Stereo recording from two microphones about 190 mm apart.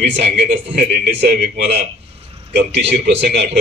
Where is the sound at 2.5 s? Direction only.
60° right (ahead or behind).